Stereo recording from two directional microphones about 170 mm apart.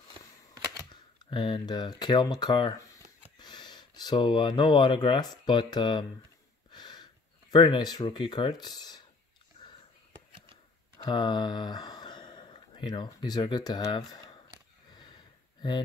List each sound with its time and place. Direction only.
1.2 s speech: 30° left (ahead or behind)
6.7 s a sound: 25° left (ahead or behind)
7.5 s speech: 25° left (ahead or behind)
11.0 s speech: 25° left (ahead or behind)